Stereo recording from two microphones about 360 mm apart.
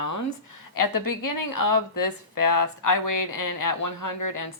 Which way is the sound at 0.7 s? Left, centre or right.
Left.